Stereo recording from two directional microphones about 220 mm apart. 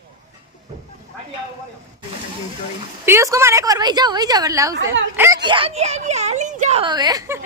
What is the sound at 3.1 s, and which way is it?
A woman's voice, 15° right (ahead or behind).